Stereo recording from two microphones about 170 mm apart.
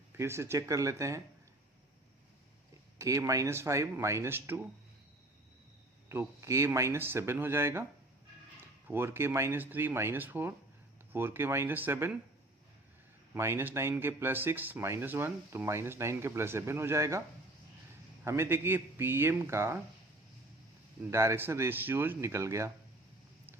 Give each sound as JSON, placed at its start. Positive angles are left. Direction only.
{"t": 0.1, "sound": "speech", "side_deg": -15}
{"t": 3.0, "sound": "speech", "side_deg": -20}
{"t": 6.1, "sound": "speech", "side_deg": -15}
{"t": 13.3, "sound": "speech", "side_deg": -15}
{"t": 18.3, "sound": "speech", "side_deg": -15}
{"t": 21.1, "sound": "speech", "side_deg": -15}